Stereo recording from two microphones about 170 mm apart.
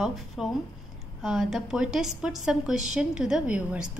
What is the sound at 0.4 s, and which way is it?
A woman's voice, 5° right (ahead or behind).